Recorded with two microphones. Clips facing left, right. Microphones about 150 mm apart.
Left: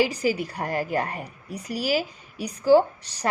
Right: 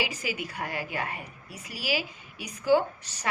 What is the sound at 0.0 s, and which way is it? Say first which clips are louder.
A woman's voice: left 9 dB; 40° left (ahead or behind).